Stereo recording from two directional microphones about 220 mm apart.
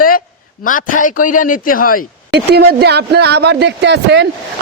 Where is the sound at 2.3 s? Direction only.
45° right (ahead or behind).